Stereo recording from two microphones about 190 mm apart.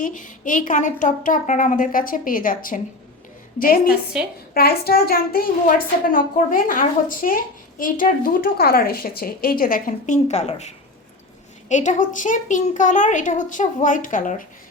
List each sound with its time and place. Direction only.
0.0 s a woman's voice: 45° left (ahead or behind)